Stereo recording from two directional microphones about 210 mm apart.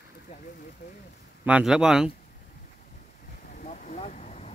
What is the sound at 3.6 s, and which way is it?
Vehicle, 35° left (ahead or behind).